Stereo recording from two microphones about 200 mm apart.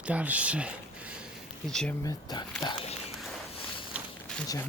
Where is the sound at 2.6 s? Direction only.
25° left (ahead or behind).